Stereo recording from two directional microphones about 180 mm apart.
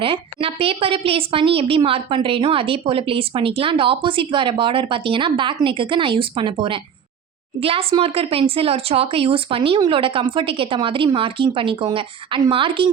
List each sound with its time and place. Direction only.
0.0 s a woman's voice: 30° right (ahead or behind)